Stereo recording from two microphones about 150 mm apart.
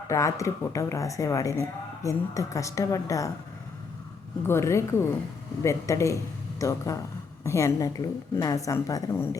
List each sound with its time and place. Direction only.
0.1 s a woman's voice: 20° left (ahead or behind)
4.4 s a woman's voice: 20° left (ahead or behind)